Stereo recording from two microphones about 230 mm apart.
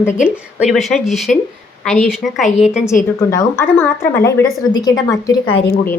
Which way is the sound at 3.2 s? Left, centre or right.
Centre.